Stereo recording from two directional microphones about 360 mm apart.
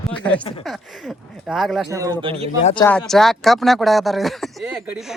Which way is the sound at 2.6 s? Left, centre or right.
Centre.